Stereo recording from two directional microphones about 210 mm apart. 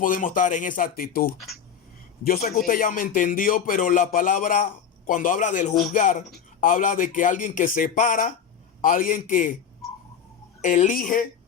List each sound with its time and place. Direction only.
0.0 s a man's voice: 40° left (ahead or behind)
10.6 s a man's voice: 35° left (ahead or behind)